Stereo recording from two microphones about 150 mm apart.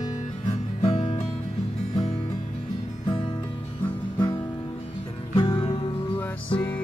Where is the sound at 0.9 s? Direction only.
35° left (ahead or behind).